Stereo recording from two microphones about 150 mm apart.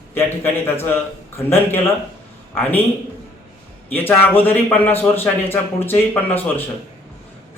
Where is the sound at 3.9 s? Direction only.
15° left (ahead or behind).